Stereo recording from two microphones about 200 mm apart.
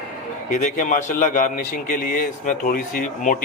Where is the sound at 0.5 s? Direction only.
40° left (ahead or behind).